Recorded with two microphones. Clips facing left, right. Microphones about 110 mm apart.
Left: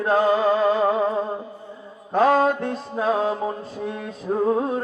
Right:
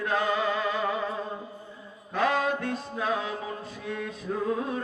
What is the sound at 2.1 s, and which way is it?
Mantra, 40° left (ahead or behind).